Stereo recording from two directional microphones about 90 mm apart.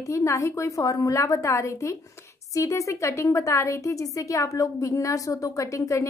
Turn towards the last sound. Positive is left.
turn(degrees=35)  # may be behind; listen again after turning